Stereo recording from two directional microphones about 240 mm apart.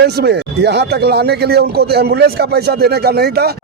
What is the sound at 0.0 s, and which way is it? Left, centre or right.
Speech, right.